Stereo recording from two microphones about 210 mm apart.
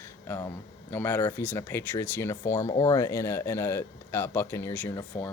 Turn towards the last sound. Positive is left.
turn(degrees=10)  # may be behind; listen again after turning